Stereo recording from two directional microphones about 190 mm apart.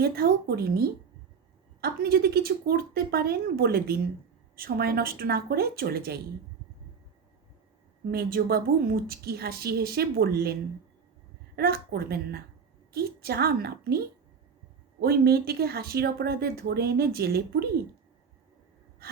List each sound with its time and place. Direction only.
0.0 s a woman's voice: 55° right (ahead or behind)
8.1 s a woman's voice: 55° right (ahead or behind)
11.5 s a woman's voice: 55° right (ahead or behind)
15.0 s a woman's voice: 55° right (ahead or behind)
19.0 s gasp: 55° right (ahead or behind)